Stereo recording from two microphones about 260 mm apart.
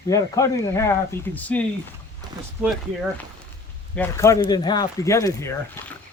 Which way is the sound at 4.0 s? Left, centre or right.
Centre.